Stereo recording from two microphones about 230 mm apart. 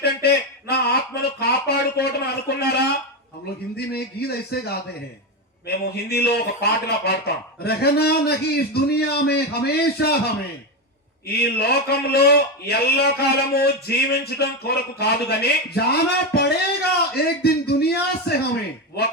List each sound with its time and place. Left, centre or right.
0.0 s a sound: left
3.8 s speech: left
5.6 s a man's voice: left